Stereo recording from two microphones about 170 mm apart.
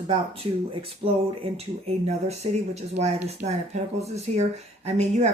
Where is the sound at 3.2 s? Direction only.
40° right (ahead or behind).